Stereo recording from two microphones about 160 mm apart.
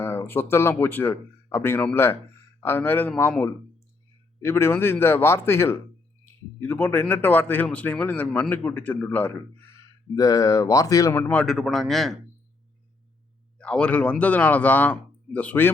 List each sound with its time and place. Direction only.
0.0 s speech: 15° left (ahead or behind)
13.6 s speech: 5° left (ahead or behind)